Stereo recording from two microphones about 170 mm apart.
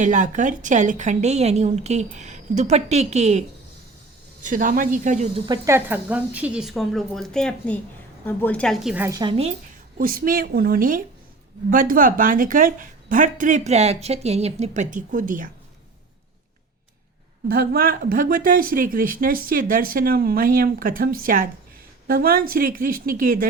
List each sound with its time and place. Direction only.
0.0 s speech: 45° right (ahead or behind)
4.4 s speech: 50° right (ahead or behind)
5.5 s speech: 15° right (ahead or behind)
9.0 s a woman's voice: 25° right (ahead or behind)
10.0 s speech: 55° right (ahead or behind)
17.5 s speech: 60° right (ahead or behind)